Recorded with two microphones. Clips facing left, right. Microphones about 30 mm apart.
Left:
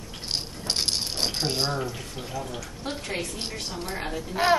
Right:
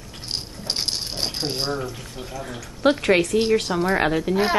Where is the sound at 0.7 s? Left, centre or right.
Centre.